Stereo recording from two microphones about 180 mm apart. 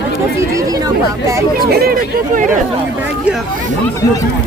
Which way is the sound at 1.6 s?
60° right (ahead or behind).